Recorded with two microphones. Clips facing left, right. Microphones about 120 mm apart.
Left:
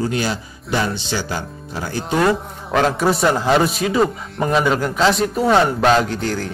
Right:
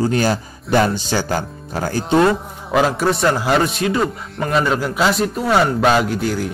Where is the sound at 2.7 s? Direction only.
5° right (ahead or behind).